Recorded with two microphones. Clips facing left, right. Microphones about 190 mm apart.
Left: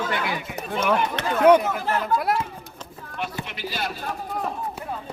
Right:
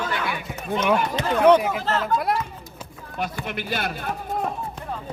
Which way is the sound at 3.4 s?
55° right (ahead or behind).